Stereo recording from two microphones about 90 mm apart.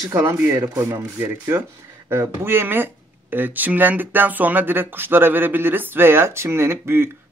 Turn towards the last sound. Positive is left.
turn(degrees=-25)  # may be behind; listen again after turning